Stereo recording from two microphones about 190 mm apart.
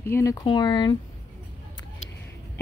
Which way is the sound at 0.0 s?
15° left (ahead or behind).